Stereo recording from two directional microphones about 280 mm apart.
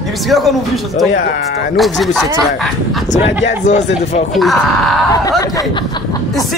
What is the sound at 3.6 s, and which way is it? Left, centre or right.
Speech, left.